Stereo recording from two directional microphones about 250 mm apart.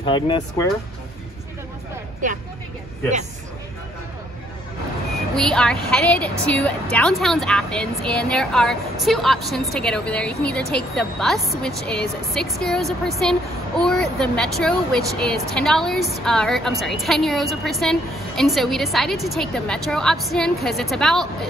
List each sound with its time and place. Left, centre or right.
0.0 s speech: centre
5.1 s a woman's voice: centre